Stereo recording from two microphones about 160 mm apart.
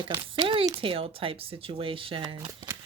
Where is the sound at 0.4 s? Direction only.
35° right (ahead or behind).